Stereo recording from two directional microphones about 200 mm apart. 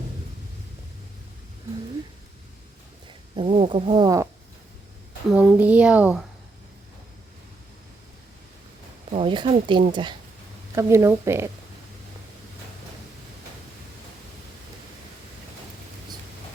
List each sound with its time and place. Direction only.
3.3 s speech: 30° right (ahead or behind)
5.3 s a child's voice: 5° right (ahead or behind)
9.1 s a child's voice: 25° right (ahead or behind)